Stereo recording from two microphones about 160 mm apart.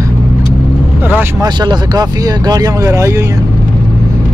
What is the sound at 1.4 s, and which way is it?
Speech, 25° right (ahead or behind).